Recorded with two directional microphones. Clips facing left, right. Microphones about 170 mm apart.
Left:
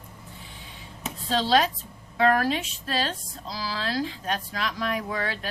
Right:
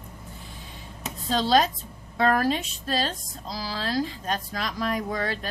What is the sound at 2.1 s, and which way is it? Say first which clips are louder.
A woman's voice: even; 40° right (ahead or behind).